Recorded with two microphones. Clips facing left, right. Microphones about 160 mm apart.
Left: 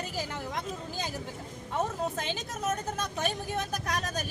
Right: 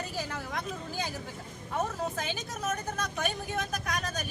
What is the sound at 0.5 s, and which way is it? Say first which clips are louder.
Speech: even; 20° left (ahead or behind).